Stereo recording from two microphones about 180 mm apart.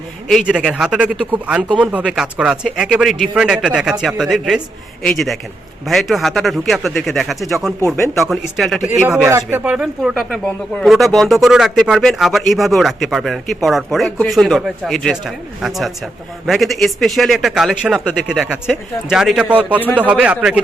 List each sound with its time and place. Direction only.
0.3 s speech: centre (ahead or behind)
9.2 s speech: 15° right (ahead or behind)